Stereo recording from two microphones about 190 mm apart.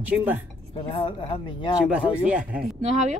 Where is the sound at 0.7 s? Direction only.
30° left (ahead or behind).